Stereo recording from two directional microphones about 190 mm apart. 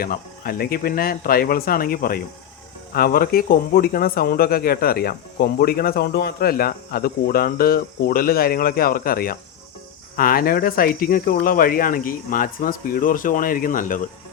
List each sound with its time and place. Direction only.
0.0 s speech: 50° left (ahead or behind)